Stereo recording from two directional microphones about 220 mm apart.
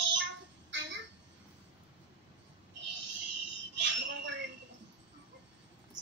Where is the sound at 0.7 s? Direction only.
55° right (ahead or behind).